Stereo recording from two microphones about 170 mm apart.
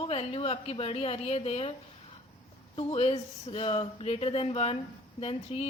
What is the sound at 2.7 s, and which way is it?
Speech, 35° left (ahead or behind).